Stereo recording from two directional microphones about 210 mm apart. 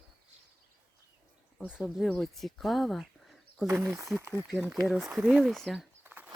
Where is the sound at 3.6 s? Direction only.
10° right (ahead or behind).